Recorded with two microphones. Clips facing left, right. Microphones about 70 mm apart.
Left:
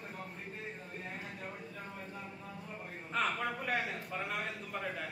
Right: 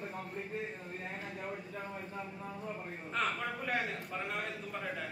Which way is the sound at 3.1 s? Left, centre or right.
Centre.